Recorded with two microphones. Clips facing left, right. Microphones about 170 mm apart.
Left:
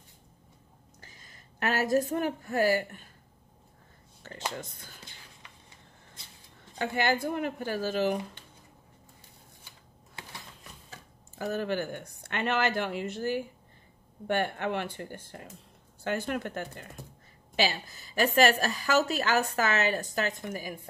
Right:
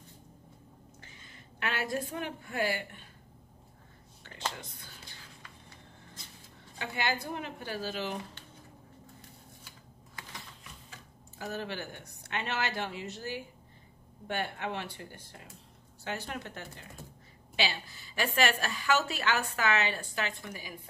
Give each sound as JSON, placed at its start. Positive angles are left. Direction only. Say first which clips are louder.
{"t": 1.0, "sound": "a woman's voice", "louder": "right 1 dB", "side_deg": 40}
{"t": 4.2, "sound": "a sound", "louder": "left 7 dB", "side_deg": 40}
{"t": 6.8, "sound": "speech", "louder": "left 6 dB", "side_deg": 50}
{"t": 10.2, "sound": "typewriter", "louder": "left 2 dB", "side_deg": 25}
{"t": 11.3, "sound": "a woman's voice", "louder": "left 7 dB", "side_deg": 50}